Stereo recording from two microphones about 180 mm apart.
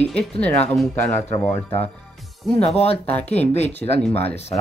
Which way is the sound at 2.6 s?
35° left (ahead or behind).